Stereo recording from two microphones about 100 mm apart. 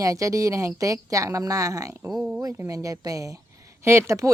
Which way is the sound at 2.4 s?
30° right (ahead or behind).